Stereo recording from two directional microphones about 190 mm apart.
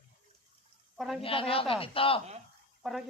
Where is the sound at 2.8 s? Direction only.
Centre (ahead or behind).